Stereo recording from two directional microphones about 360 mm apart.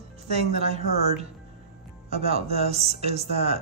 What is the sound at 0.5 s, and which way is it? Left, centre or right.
Speech, centre.